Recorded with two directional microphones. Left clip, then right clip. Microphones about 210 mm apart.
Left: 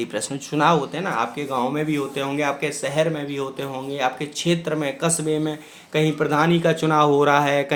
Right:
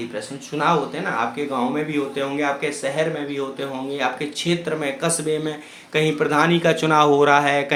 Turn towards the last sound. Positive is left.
turn(degrees=20)  # may be behind; listen again after turning